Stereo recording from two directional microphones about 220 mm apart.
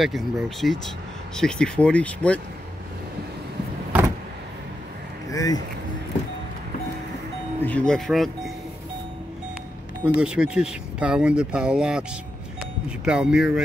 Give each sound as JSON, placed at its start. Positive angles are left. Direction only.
{"t": 0.0, "sound": "speech", "side_deg": 0}
{"t": 5.3, "sound": "speech", "side_deg": 15}
{"t": 7.6, "sound": "speech", "side_deg": 5}
{"t": 10.0, "sound": "speech", "side_deg": -5}